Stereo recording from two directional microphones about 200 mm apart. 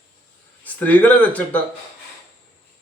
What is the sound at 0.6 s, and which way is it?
Speech, 10° left (ahead or behind).